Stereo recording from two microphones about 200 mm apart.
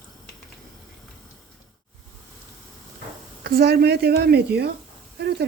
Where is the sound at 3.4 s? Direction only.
50° right (ahead or behind).